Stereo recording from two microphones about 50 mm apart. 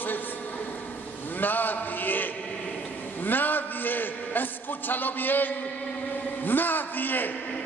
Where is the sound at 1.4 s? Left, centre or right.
Left.